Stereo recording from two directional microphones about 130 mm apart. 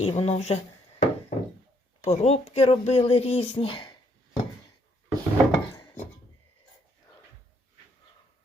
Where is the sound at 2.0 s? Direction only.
55° left (ahead or behind).